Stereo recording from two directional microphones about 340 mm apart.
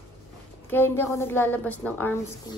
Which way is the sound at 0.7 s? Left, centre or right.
Centre.